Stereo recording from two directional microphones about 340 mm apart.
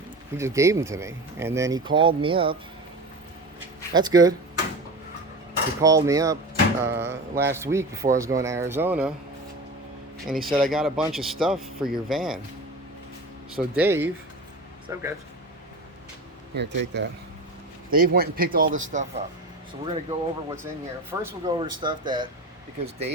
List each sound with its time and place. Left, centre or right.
0.3 s speech: centre
3.9 s speech: centre
5.8 s speech: centre
10.2 s speech: centre
13.6 s speech: centre
16.6 s a man's voice: right; by 22.3 s centre